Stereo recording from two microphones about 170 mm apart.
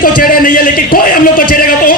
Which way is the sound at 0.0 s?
55° left (ahead or behind).